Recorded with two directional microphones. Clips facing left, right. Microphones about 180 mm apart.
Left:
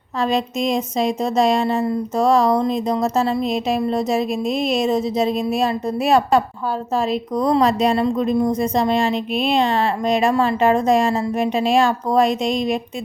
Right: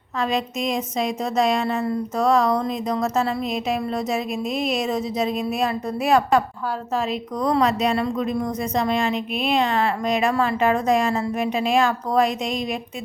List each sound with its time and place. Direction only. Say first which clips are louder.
0.2 s a woman's voice: left 4 dB; 30° left (ahead or behind)
4.3 s a woman's voice: left 4 dB; 10° right (ahead or behind)
4.7 s a woman's voice: left 5 dB; 25° left (ahead or behind)